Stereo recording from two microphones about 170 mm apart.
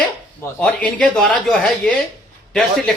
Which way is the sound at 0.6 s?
5° left (ahead or behind).